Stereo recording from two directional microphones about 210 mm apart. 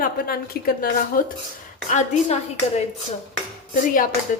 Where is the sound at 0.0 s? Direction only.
45° left (ahead or behind).